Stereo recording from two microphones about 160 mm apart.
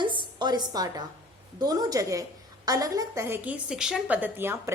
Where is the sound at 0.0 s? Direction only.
30° right (ahead or behind).